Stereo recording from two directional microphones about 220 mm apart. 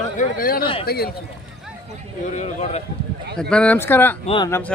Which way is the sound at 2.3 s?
30° left (ahead or behind).